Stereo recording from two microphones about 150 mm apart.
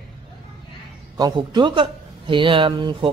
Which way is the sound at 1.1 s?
30° right (ahead or behind).